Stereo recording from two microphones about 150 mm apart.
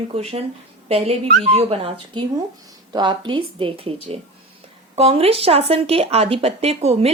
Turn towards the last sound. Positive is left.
turn(degrees=-45)  # may be behind; listen again after turning